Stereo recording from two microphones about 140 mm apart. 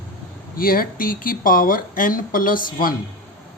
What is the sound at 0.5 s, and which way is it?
Speech, 90° left.